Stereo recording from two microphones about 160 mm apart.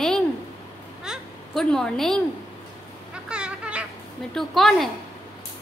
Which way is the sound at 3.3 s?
5° right (ahead or behind).